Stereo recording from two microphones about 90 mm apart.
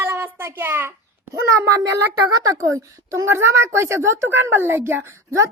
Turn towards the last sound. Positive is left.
turn(degrees=-30)  # may be behind; listen again after turning